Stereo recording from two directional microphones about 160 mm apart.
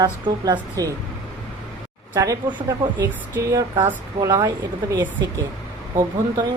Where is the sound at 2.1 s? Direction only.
20° right (ahead or behind).